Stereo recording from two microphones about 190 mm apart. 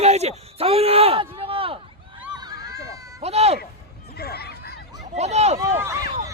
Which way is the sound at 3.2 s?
35° right (ahead or behind).